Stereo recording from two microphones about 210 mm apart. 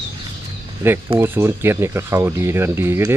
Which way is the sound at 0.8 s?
10° right (ahead or behind).